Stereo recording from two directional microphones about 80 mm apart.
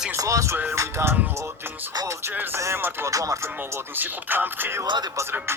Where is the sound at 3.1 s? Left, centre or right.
Right.